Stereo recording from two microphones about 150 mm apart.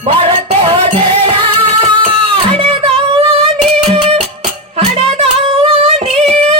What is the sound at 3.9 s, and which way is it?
Music, 40° right (ahead or behind).